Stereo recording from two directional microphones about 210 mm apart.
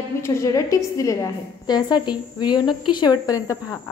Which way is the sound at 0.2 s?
15° left (ahead or behind).